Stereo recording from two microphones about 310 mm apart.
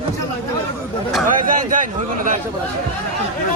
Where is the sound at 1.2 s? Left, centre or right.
Right.